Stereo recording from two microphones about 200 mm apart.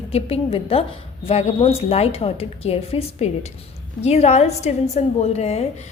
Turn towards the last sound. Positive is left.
turn(degrees=30)  # may be behind; listen again after turning